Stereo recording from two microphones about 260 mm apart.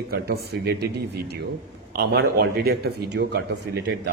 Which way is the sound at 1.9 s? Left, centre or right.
Right.